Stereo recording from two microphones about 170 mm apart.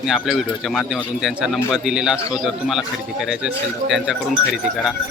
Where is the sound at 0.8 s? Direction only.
Centre (ahead or behind).